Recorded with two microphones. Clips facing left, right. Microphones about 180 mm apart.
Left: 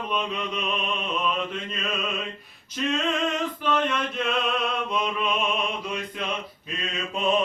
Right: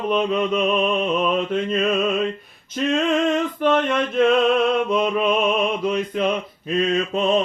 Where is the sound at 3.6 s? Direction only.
55° right (ahead or behind).